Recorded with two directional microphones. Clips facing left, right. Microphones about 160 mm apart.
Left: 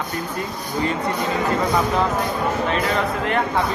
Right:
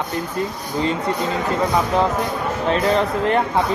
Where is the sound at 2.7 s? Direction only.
35° right (ahead or behind).